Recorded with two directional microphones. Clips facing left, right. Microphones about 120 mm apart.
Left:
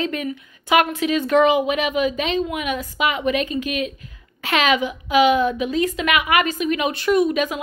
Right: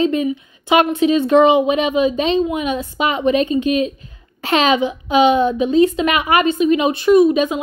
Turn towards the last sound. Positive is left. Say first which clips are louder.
# right 6 dB
turn(degrees=-25)  # may be behind; listen again after turning